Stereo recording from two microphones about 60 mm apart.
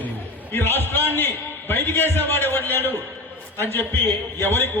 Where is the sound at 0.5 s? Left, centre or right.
Left.